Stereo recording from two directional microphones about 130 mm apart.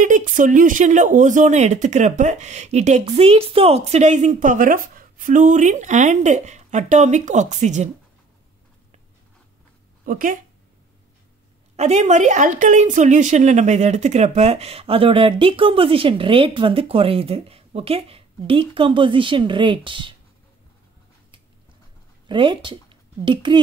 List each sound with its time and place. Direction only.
0.0 s speech: 85° right; by 7.9 s 65° right (ahead or behind)
10.0 s speech: 90° right
11.7 s a woman's voice: 60° right (ahead or behind); by 20.2 s 40° right (ahead or behind)
22.3 s speech: 40° right (ahead or behind)